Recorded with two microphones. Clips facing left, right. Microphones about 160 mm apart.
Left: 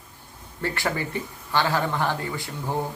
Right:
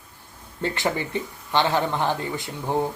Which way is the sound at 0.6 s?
20° right (ahead or behind).